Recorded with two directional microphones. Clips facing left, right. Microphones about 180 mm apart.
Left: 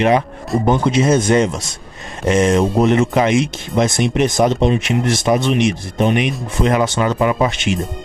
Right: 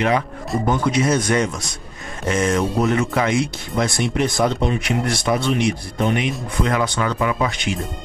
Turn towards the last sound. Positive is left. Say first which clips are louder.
# left 5 dB
turn(degrees=25)  # may be behind; listen again after turning